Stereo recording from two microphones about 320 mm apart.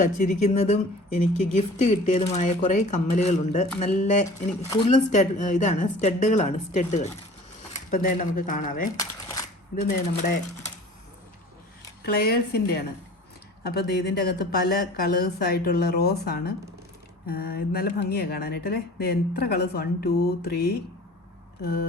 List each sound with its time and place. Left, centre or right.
0.0 s speech: left
9.0 s a sound: centre
9.7 s speech: left
12.0 s speech: left